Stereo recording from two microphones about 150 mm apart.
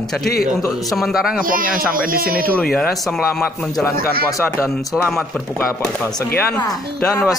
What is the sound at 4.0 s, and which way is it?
Speech, 85° right.